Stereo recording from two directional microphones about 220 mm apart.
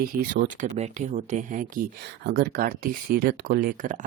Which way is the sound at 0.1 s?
40° right (ahead or behind).